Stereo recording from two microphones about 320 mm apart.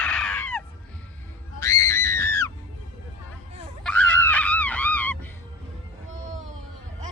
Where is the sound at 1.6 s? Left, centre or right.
Centre.